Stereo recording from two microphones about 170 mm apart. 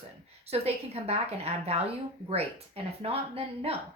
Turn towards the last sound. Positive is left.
turn(degrees=-35)  # may be behind; listen again after turning